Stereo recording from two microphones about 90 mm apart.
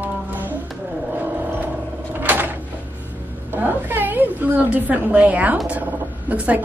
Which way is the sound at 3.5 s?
20° right (ahead or behind).